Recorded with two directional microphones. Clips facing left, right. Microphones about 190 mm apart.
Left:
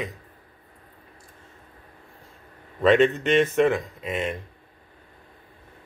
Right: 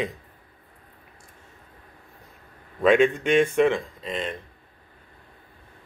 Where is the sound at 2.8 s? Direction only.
10° right (ahead or behind).